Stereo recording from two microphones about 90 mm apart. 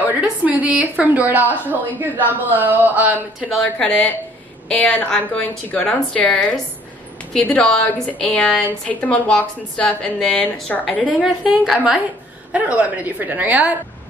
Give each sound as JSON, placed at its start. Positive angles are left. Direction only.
{"t": 0.0, "sound": "a woman's voice", "side_deg": -15}
{"t": 3.3, "sound": "a woman's voice", "side_deg": 0}
{"t": 3.6, "sound": "a woman's voice", "side_deg": 15}
{"t": 11.6, "sound": "a woman's voice", "side_deg": -5}